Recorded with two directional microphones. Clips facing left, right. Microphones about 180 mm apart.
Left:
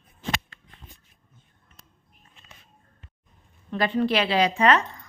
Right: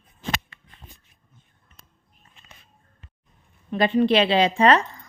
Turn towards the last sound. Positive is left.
turn(degrees=-30)  # may be behind; listen again after turning